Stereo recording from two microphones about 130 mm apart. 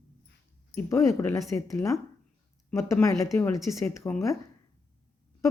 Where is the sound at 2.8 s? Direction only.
20° left (ahead or behind).